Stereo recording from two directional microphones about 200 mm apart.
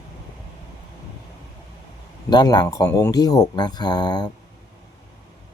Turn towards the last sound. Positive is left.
turn(degrees=20)  # may be behind; listen again after turning